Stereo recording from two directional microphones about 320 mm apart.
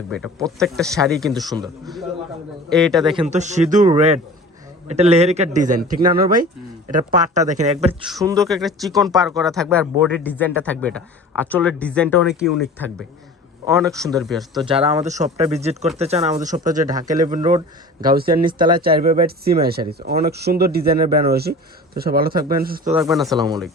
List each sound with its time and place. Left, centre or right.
0.6 s a man's voice: centre
3.1 s speech: centre
8.0 s a man's voice: centre
14.6 s speech: centre
23.0 s a man's voice: centre